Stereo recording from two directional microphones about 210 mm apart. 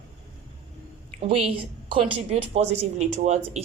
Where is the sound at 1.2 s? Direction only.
25° right (ahead or behind).